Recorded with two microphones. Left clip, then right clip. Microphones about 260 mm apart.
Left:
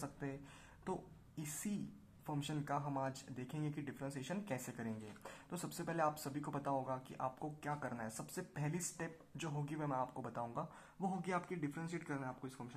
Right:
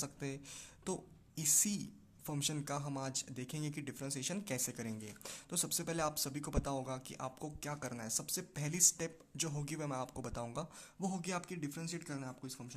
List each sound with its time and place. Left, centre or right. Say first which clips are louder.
0.0 s speech: right 3 dB; right
2.2 s speech: right 3 dB; right